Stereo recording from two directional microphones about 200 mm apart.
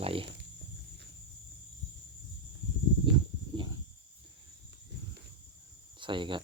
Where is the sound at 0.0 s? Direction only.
30° right (ahead or behind).